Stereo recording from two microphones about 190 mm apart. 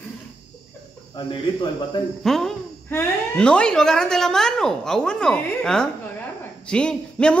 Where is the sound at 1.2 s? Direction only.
25° left (ahead or behind).